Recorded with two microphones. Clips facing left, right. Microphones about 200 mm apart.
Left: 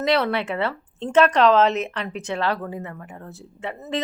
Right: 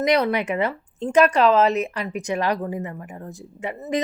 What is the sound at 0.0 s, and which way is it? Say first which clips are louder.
Speech: right 1 dB; 15° right (ahead or behind).